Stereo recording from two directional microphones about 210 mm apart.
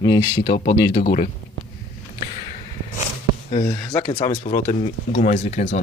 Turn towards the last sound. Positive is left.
turn(degrees=35)  # may be behind; listen again after turning